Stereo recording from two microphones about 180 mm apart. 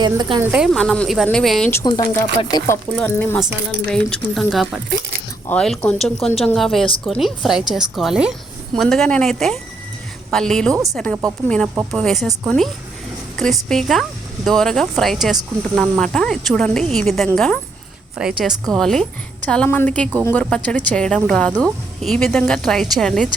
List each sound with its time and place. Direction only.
0.0 s speech: 25° right (ahead or behind)
0.4 s speech: 5° right (ahead or behind)
1.8 s speech: 25° left (ahead or behind)
3.0 s a woman's voice: 10° left (ahead or behind)